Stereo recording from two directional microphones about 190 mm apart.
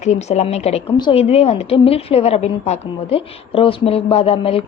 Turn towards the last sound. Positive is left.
turn(degrees=30)  # may be behind; listen again after turning